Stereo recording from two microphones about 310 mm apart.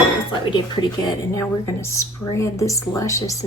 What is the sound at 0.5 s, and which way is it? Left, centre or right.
Speech, centre.